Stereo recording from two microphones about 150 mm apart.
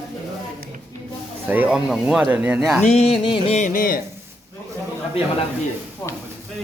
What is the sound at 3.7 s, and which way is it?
Speech, 70° left (ahead or behind).